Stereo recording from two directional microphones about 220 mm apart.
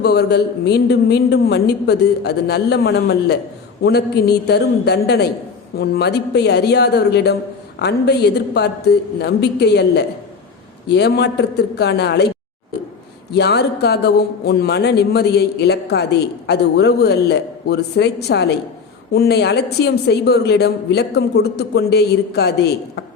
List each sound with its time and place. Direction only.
0.0 s speech: 45° left (ahead or behind)
13.3 s speech: 45° left (ahead or behind)